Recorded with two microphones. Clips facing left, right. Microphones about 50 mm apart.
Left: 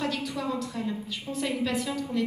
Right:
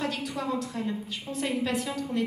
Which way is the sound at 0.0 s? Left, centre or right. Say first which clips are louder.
Left 1 dB; right.